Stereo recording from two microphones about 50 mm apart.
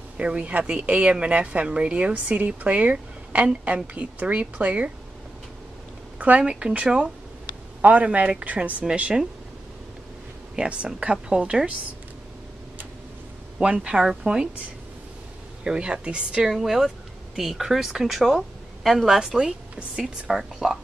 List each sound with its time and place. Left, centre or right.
0.2 s speech: right
6.1 s speech: right
6.4 s speech: centre
10.5 s speech: right
13.6 s speech: centre
15.6 s speech: centre
16.4 s speech: centre